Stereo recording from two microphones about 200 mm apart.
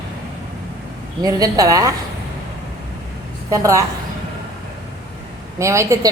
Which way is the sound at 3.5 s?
15° right (ahead or behind).